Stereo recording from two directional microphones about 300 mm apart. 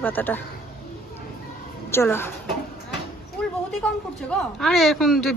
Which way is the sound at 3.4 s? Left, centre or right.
Centre.